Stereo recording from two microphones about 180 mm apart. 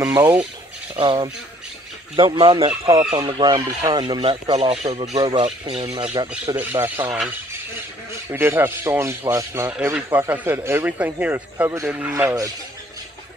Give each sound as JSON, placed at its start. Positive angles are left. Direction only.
{"t": 0.0, "sound": "speech", "side_deg": -10}
{"t": 0.9, "sound": "speech", "side_deg": -30}
{"t": 4.8, "sound": "speech", "side_deg": -35}
{"t": 5.1, "sound": "speech", "side_deg": -25}
{"t": 6.5, "sound": "speech", "side_deg": -10}
{"t": 8.3, "sound": "speech", "side_deg": -10}